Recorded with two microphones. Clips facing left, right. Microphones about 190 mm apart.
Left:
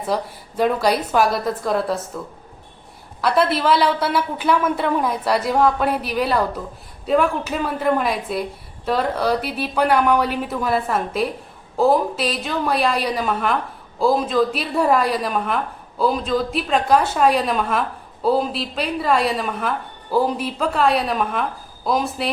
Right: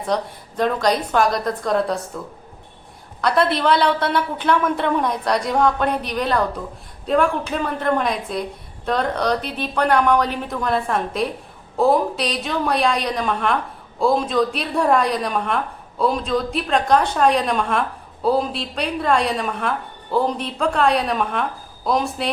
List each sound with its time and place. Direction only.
0.0 s a woman's voice: 5° left (ahead or behind)